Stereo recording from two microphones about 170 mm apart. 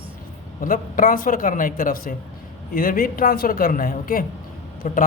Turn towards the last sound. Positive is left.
turn(degrees=50)  # may be behind; listen again after turning